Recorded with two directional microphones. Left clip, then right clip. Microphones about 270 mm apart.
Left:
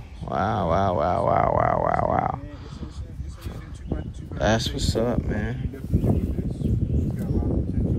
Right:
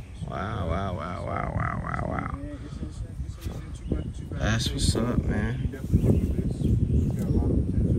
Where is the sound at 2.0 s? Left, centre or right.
Right.